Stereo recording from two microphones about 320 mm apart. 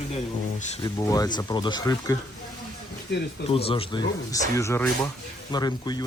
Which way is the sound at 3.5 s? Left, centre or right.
Centre.